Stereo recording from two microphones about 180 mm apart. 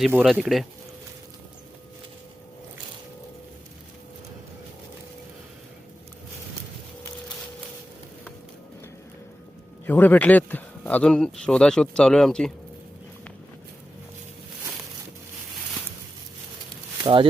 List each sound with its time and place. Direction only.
0.1 s speech: 5° right (ahead or behind)
9.8 s speech: 10° left (ahead or behind)
17.0 s speech: 30° right (ahead or behind)